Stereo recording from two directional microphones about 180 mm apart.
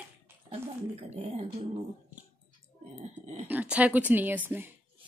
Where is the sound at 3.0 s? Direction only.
40° right (ahead or behind).